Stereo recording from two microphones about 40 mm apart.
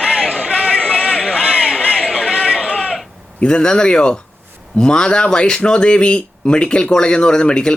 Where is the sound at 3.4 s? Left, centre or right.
Left.